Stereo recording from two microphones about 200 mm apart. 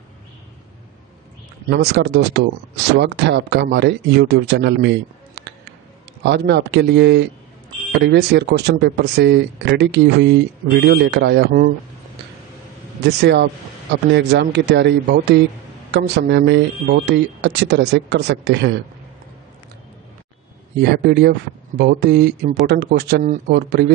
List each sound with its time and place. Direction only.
1.7 s speech: 55° right (ahead or behind)
13.2 s speech: 60° right (ahead or behind)
21.0 s speech: 50° right (ahead or behind)